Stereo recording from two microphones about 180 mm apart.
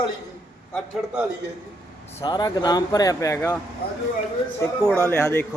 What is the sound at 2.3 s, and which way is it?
Speech, 20° left (ahead or behind).